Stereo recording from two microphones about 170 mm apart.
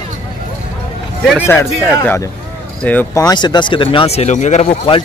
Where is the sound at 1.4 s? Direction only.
15° left (ahead or behind).